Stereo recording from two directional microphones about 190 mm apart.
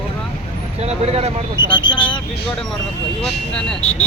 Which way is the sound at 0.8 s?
35° right (ahead or behind).